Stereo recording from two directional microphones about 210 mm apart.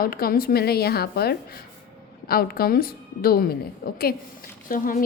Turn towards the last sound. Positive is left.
turn(degrees=40)  # may be behind; listen again after turning